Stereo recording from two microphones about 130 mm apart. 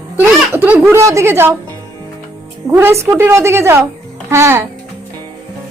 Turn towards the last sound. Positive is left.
turn(degrees=-20)  # may be behind; listen again after turning